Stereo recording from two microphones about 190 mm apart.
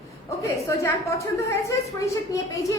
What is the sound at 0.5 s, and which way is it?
Speech, 15° left (ahead or behind).